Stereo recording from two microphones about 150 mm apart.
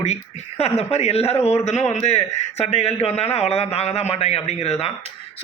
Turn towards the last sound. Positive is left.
turn(degrees=45)  # may be behind; listen again after turning